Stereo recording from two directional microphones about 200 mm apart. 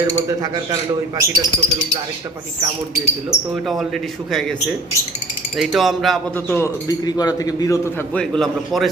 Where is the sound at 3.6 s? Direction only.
Centre (ahead or behind).